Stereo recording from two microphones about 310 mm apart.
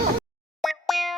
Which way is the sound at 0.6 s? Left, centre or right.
Centre.